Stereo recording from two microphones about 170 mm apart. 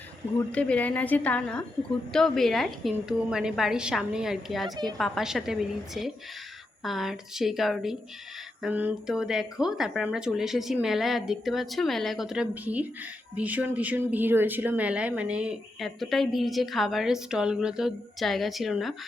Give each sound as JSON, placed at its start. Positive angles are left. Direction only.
{"t": 0.5, "sound": "a woman's voice", "side_deg": 5}